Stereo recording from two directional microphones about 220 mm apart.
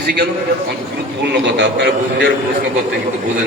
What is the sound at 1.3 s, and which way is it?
Speech, 50° right (ahead or behind).